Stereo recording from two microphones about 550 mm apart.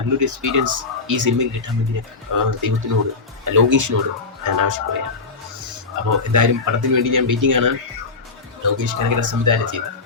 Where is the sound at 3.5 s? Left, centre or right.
Right.